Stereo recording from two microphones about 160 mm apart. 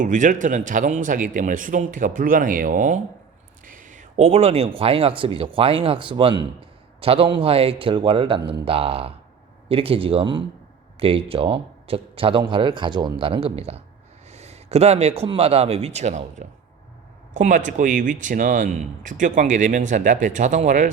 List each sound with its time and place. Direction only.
0.0 s speech: 55° right (ahead or behind)